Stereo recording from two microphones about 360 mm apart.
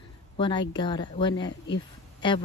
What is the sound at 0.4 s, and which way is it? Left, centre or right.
Speech, centre.